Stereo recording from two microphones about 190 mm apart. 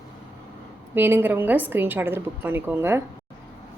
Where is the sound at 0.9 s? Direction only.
10° right (ahead or behind).